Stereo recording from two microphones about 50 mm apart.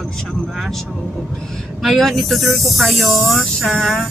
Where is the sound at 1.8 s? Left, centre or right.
Centre.